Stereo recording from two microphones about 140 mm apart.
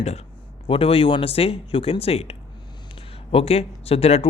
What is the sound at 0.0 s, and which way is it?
Speech, 50° left (ahead or behind).